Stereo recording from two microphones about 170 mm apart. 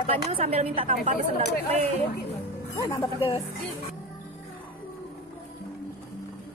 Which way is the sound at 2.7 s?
20° left (ahead or behind).